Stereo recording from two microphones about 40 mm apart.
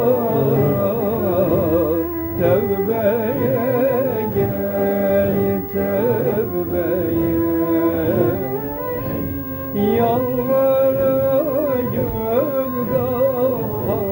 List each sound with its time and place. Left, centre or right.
0.0 s music: centre
7.6 s music: centre
9.7 s music: centre